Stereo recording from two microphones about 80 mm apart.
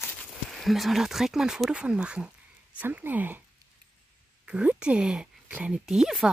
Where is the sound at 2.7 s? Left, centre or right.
Right.